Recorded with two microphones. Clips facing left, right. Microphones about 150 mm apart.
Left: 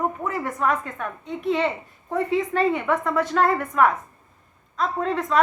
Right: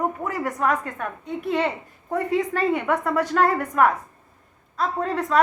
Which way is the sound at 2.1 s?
40° right (ahead or behind).